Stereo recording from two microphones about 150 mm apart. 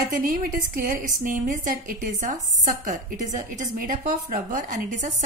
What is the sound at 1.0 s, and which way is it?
A woman's voice, 60° right (ahead or behind).